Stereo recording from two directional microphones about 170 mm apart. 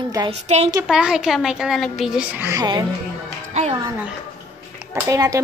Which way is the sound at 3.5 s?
40° right (ahead or behind).